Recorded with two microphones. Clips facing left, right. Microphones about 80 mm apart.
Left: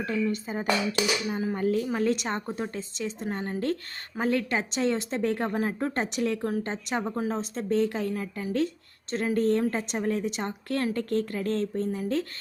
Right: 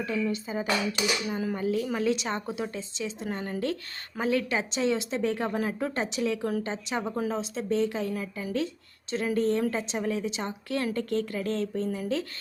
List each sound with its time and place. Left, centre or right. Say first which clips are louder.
0.0 s speech: left 1 dB; left
1.3 s speech: left 1 dB; left
1.5 s a woman's voice: left 3 dB; left
4.2 s speech: even; left
8.1 s speech: left 1 dB; left